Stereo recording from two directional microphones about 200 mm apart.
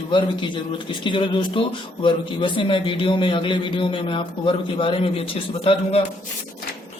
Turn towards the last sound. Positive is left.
turn(degrees=25)  # may be behind; listen again after turning